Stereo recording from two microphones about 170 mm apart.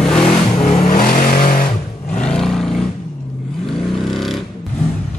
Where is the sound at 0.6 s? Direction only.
45° left (ahead or behind); by 1.4 s 60° left (ahead or behind).